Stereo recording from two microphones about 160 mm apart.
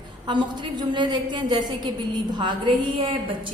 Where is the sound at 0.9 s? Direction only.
30° right (ahead or behind).